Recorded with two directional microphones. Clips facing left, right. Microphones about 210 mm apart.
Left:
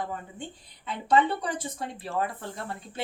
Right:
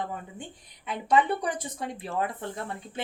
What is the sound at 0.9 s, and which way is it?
Speech, 15° right (ahead or behind).